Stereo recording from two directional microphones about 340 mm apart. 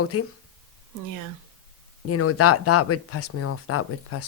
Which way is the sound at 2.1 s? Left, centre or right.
Left.